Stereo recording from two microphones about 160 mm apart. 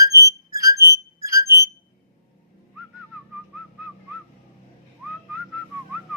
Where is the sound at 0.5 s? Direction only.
20° right (ahead or behind).